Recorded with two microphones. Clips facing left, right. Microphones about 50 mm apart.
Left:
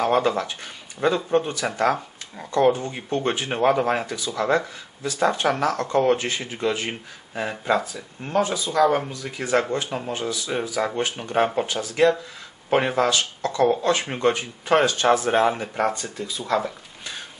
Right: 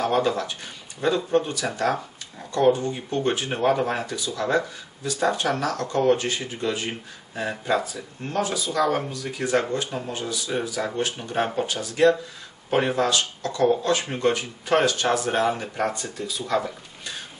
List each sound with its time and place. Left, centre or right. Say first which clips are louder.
0.0 s speech: left 2 dB; left